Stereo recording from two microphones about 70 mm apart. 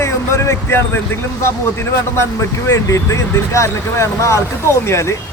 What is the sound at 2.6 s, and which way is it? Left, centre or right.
Speech, left.